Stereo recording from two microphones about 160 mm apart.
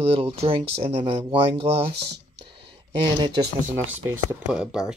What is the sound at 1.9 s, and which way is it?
Speech, 90° right.